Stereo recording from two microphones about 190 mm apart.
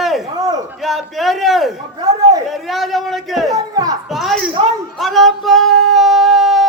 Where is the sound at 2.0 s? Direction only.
20° right (ahead or behind).